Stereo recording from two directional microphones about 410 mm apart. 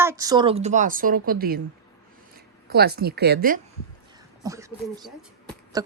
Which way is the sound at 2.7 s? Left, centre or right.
Right.